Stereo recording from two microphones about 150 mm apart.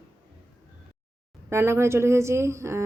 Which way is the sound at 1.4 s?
15° right (ahead or behind).